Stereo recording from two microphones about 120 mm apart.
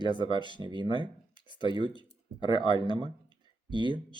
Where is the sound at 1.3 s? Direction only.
40° left (ahead or behind).